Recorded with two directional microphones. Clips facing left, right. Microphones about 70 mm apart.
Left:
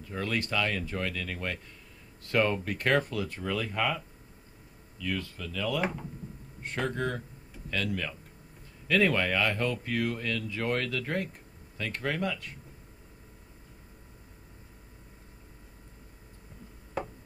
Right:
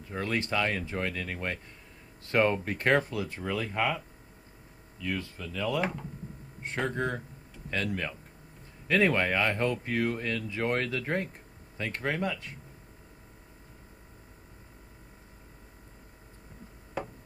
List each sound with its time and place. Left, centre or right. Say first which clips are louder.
0.1 s speech: right 1 dB; right
5.8 s speech: even; centre
6.6 s speech: right 1 dB; right